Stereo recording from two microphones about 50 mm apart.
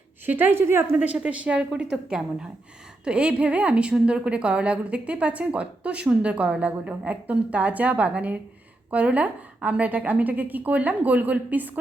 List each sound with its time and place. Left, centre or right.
0.3 s a woman's voice: right
0.9 s a woman's voice: right
1.5 s a woman's voice: centre; by 11.8 s right